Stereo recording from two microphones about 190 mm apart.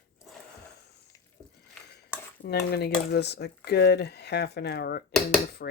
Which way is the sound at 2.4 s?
60° left (ahead or behind).